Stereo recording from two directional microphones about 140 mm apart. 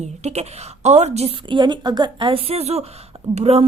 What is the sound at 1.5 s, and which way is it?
A woman's voice, 35° right (ahead or behind).